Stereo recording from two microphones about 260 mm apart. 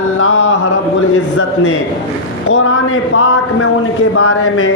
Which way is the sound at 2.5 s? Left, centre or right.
Left.